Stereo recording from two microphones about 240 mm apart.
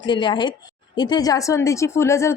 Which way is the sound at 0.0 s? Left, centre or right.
Centre.